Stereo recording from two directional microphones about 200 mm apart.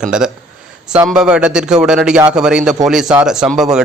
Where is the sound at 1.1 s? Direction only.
5° right (ahead or behind).